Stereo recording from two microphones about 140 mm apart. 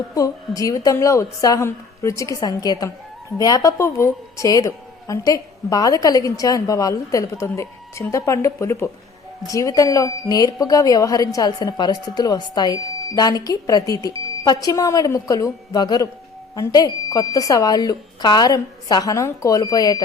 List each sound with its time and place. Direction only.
0.1 s a woman's voice: 25° left (ahead or behind)